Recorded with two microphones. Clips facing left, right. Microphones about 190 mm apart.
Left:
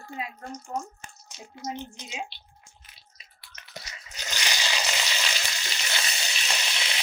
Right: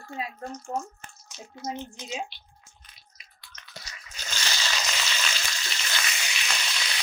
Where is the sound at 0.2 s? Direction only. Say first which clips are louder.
Right 2 dB; 30° right (ahead or behind).